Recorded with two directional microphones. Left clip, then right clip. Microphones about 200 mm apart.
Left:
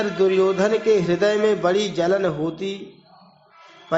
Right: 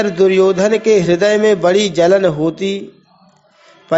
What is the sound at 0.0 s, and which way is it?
A man's voice, 30° right (ahead or behind).